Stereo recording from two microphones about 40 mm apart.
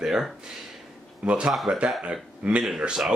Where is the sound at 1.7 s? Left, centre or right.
Right.